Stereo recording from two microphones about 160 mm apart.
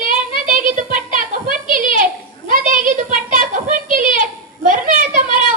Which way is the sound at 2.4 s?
55° right (ahead or behind).